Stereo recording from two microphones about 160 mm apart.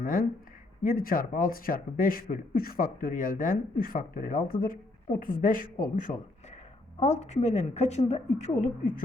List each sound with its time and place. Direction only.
0.0 s speech: 60° left (ahead or behind)
4.6 s a sound: 60° left (ahead or behind)
5.2 s speech: 60° left (ahead or behind)
7.0 s a woman's voice: 45° left (ahead or behind)